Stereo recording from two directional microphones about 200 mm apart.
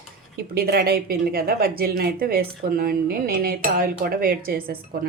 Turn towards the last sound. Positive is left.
turn(degrees=-45)  # may be behind; listen again after turning